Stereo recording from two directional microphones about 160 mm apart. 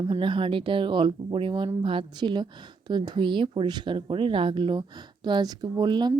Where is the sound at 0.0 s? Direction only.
30° right (ahead or behind).